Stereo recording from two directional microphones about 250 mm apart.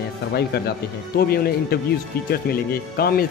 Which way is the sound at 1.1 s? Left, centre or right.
Left.